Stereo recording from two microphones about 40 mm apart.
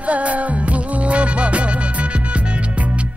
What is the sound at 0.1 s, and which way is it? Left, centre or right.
Music, right.